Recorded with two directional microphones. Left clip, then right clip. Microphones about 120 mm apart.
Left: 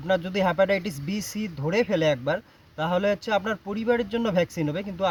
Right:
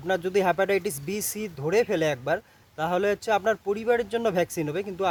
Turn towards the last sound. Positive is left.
turn(degrees=-50)  # may be behind; listen again after turning